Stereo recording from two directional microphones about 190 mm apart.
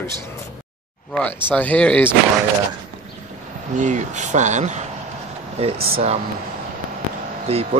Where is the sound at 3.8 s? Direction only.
40° right (ahead or behind).